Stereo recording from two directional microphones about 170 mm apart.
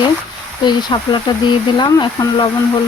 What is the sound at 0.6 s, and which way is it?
Speech, 25° left (ahead or behind).